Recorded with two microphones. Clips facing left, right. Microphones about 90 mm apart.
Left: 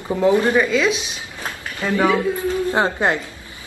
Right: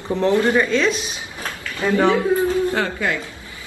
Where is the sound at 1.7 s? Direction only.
25° right (ahead or behind).